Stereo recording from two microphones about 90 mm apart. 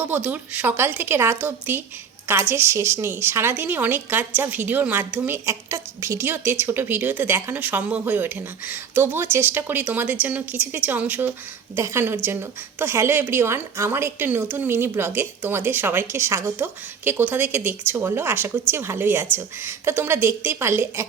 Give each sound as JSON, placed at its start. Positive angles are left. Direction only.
{"t": 0.0, "sound": "a woman's voice", "side_deg": -20}